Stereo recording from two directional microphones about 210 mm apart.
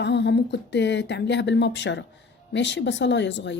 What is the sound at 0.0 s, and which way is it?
A woman's voice, 55° left (ahead or behind).